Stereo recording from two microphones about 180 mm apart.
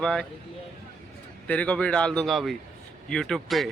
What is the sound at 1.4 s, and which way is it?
Speech, 5° left (ahead or behind).